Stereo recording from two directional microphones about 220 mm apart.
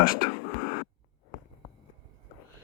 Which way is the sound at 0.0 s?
40° left (ahead or behind).